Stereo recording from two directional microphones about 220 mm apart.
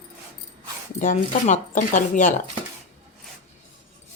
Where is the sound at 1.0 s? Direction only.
35° left (ahead or behind).